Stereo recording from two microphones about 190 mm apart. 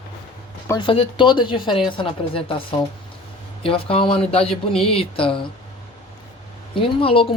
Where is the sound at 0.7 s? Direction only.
25° left (ahead or behind).